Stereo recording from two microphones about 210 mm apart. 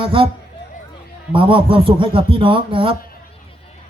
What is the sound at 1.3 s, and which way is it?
Speech, 25° right (ahead or behind).